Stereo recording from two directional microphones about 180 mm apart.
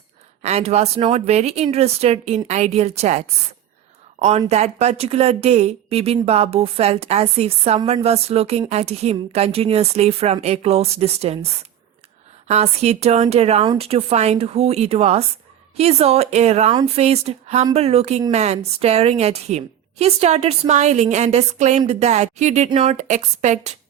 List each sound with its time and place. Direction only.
0.4 s a woman's voice: 35° right (ahead or behind)
7.8 s speech: 25° right (ahead or behind)
8.0 s a woman's voice: 35° right (ahead or behind)
12.5 s a woman's voice: 35° right (ahead or behind)